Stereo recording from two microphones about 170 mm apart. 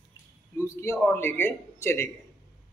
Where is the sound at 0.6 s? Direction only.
15° left (ahead or behind).